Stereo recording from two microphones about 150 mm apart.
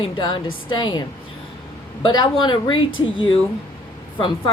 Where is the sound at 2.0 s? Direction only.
30° left (ahead or behind).